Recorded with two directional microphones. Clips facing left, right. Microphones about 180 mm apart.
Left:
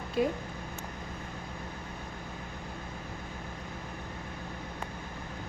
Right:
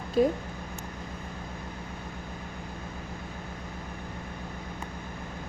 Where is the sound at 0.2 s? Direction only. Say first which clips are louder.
Right 5 dB; 40° right (ahead or behind).